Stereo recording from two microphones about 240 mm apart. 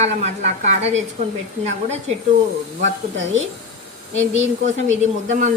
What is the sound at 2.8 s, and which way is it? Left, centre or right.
Speech, right.